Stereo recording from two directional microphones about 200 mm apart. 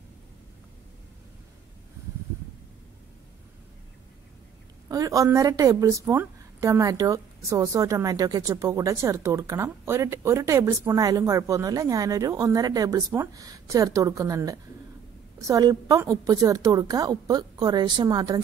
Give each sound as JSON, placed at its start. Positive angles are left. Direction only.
{"t": 4.8, "sound": "a woman's voice", "side_deg": -15}